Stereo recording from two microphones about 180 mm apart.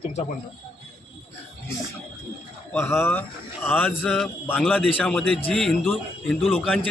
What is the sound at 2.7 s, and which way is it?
Speech, 10° left (ahead or behind).